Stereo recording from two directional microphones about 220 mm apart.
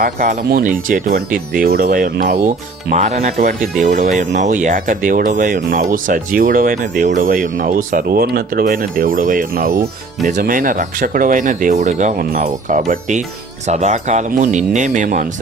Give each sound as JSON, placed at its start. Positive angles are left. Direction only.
{"t": 0.0, "sound": "speech", "side_deg": -40}